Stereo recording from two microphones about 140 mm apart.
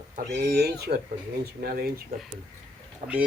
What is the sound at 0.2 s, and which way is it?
Speech, 90° right.